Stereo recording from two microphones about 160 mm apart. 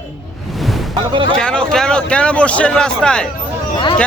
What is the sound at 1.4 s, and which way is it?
A man's voice, 5° left (ahead or behind).